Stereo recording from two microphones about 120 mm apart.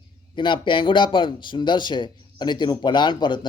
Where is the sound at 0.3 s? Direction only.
40° left (ahead or behind).